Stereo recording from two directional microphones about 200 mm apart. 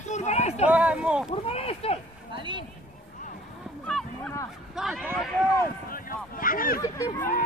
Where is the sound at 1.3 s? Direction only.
30° left (ahead or behind).